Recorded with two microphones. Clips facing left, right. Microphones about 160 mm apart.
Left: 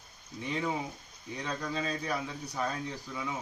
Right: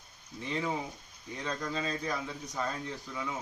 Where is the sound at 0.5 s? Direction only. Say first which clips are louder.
Even; 5° left (ahead or behind).